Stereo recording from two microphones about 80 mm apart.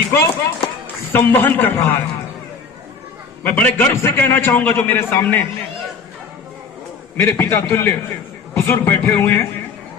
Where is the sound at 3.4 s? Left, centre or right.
Left.